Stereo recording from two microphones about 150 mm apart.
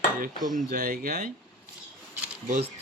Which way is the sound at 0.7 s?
55° right (ahead or behind).